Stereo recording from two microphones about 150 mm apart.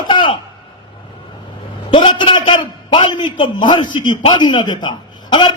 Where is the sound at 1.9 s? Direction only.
35° left (ahead or behind).